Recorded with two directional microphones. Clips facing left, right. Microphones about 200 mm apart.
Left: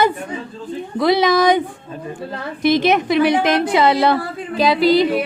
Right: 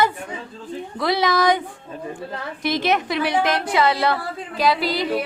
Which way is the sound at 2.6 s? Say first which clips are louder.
Left 6 dB; 20° left (ahead or behind).